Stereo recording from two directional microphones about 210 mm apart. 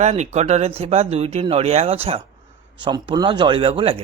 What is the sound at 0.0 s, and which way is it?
Speech, 35° right (ahead or behind).